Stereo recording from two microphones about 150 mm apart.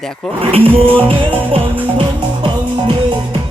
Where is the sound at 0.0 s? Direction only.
5° left (ahead or behind).